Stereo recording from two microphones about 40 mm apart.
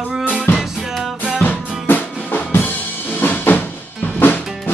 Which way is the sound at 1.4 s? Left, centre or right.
Left.